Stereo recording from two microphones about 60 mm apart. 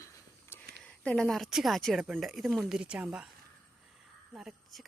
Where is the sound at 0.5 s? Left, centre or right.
Left.